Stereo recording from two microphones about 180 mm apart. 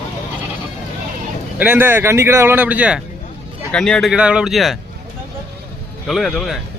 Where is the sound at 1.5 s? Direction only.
10° right (ahead or behind).